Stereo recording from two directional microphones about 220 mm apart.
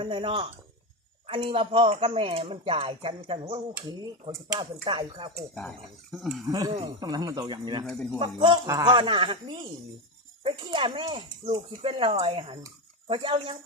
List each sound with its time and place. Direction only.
0.0 s speech: 25° right (ahead or behind)
5.5 s speech: centre (ahead or behind)
6.5 s speech: 20° right (ahead or behind)
7.9 s speech: 5° left (ahead or behind)
8.2 s speech: 20° right (ahead or behind)